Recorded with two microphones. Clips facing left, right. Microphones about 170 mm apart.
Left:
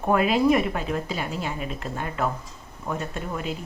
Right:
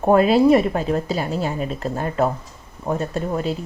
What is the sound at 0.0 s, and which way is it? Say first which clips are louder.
Speech: right 6 dB; 35° right (ahead or behind).